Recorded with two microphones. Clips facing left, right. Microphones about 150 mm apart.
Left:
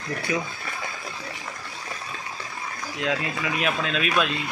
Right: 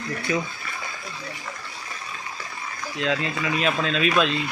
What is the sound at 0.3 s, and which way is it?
Speech, 10° left (ahead or behind).